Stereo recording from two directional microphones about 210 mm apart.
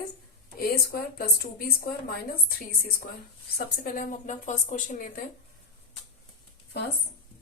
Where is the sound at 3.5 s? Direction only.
45° left (ahead or behind).